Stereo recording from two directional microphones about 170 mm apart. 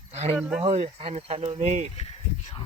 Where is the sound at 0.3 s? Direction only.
5° right (ahead or behind).